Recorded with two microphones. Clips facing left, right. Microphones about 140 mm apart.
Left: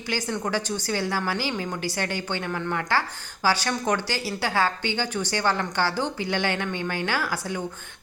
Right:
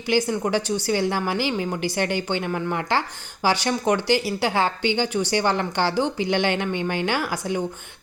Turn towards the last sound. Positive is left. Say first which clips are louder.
# right 3 dB
turn(degrees=-15)  # may be behind; listen again after turning